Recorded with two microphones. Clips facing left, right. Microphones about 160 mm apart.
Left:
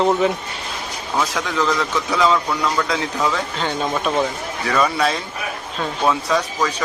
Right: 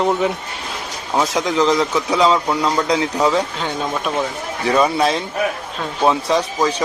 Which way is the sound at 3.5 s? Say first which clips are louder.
Left 1 dB; 5° right (ahead or behind).